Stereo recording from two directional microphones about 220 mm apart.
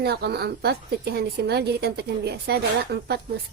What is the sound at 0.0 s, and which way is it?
Speech, 50° right (ahead or behind).